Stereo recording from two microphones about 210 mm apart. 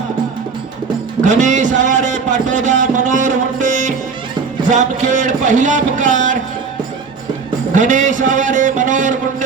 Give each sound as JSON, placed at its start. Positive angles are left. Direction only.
{"t": 1.2, "sound": "a man's voice", "side_deg": -35}
{"t": 7.7, "sound": "speech", "side_deg": -35}